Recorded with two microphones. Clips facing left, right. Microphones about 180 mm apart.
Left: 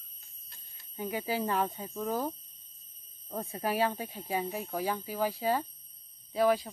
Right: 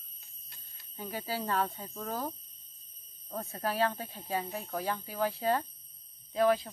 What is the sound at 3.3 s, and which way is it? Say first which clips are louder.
Speech: left 2 dB; 15° left (ahead or behind).